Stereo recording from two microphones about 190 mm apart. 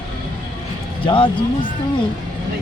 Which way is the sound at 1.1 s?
25° left (ahead or behind).